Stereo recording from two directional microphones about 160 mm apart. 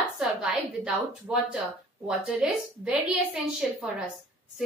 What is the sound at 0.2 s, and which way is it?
A woman's voice, 5° right (ahead or behind).